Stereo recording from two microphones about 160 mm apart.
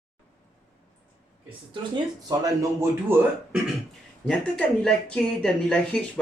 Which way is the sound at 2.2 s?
20° right (ahead or behind).